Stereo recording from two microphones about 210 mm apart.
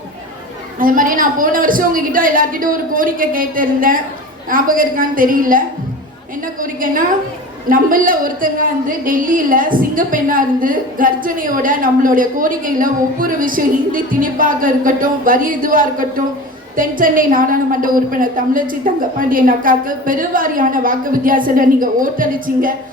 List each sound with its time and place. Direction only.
0.8 s a woman's voice: 40° right (ahead or behind)
6.6 s a sound: 40° right (ahead or behind)
7.7 s a woman's voice: 40° right (ahead or behind)